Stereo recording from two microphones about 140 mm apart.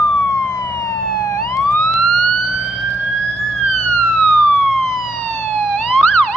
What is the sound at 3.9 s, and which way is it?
Emergency vehicle, 5° left (ahead or behind).